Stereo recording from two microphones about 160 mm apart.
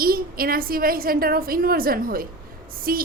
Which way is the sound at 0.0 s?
65° right (ahead or behind).